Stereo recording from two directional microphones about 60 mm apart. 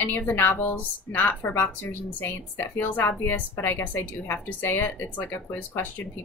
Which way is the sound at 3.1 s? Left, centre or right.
Left.